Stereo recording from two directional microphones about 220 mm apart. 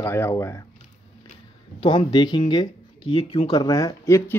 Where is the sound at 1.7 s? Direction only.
20° left (ahead or behind).